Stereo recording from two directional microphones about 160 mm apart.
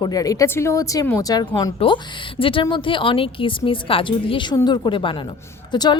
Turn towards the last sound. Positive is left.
turn(degrees=25)  # may be behind; listen again after turning